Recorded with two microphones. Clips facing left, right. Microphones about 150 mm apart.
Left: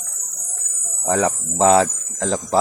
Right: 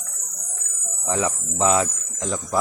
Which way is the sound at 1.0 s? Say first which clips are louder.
Left 5 dB; 35° left (ahead or behind).